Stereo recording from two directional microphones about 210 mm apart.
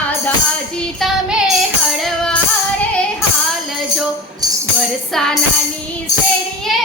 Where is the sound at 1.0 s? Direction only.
Centre (ahead or behind).